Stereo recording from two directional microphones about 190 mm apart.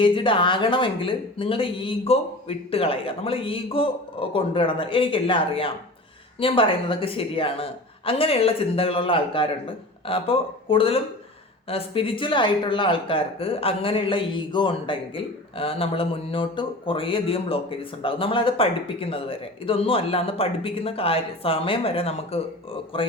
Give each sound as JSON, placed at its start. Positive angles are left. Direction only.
{"t": 0.0, "sound": "speech", "side_deg": 25}